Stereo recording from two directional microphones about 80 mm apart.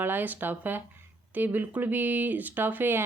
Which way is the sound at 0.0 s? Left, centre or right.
Right.